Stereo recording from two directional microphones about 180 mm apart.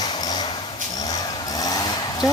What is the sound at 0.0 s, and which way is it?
Vehicle, 20° left (ahead or behind).